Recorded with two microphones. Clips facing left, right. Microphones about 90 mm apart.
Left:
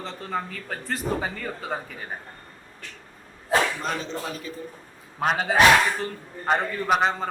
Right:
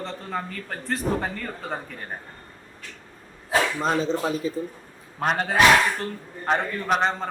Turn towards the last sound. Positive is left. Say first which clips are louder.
# left 1 dB
turn(degrees=0)  # may be behind; listen again after turning